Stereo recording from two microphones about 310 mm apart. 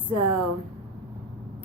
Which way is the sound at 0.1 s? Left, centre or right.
Right.